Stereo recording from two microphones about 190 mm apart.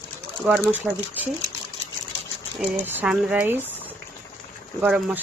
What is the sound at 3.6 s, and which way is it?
Boiling, 10° left (ahead or behind).